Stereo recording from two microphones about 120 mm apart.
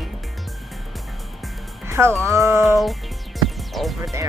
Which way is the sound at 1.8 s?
25° right (ahead or behind).